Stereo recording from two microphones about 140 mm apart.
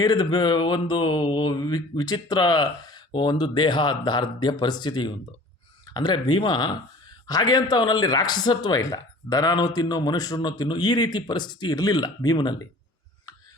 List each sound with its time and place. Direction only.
0.0 s speech: 30° left (ahead or behind)